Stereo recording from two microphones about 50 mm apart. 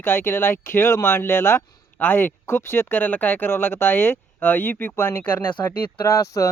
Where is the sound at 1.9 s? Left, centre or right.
Left.